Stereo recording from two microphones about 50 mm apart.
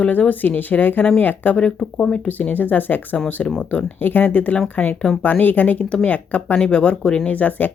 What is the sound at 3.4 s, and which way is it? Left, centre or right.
Speech, left.